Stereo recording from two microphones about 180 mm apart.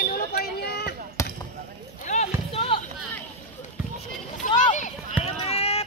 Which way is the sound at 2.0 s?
35° left (ahead or behind).